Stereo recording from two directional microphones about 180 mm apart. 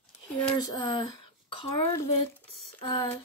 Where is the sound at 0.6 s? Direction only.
25° left (ahead or behind).